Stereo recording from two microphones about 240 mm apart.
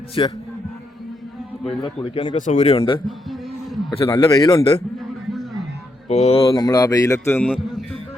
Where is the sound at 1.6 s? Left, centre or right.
Left.